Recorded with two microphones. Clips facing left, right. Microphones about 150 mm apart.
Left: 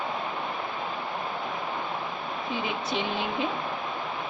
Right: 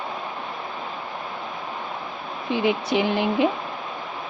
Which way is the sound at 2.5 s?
75° right (ahead or behind).